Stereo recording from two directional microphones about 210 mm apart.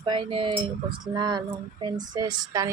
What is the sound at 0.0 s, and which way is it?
Speech, 20° right (ahead or behind).